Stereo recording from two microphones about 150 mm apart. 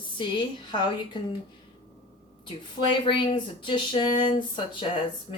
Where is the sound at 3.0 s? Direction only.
35° left (ahead or behind).